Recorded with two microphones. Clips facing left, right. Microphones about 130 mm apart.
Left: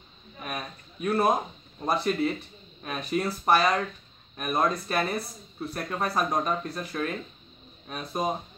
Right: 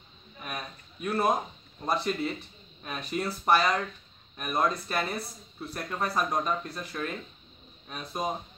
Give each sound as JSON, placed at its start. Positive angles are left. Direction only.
{"t": 0.4, "sound": "speech", "side_deg": 10}